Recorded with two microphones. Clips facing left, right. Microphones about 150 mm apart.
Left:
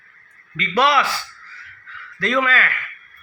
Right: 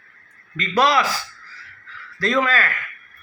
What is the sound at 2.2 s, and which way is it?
Speech, 35° right (ahead or behind).